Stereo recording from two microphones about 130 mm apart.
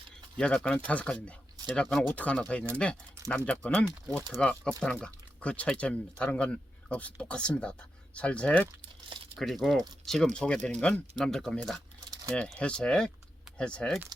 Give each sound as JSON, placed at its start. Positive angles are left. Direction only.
{"t": 0.3, "sound": "speech", "side_deg": 5}
{"t": 8.8, "sound": "crumpling", "side_deg": -40}
{"t": 9.4, "sound": "speech", "side_deg": 0}